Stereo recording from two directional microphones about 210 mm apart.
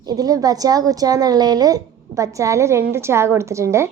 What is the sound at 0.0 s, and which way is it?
A woman's voice, 20° right (ahead or behind).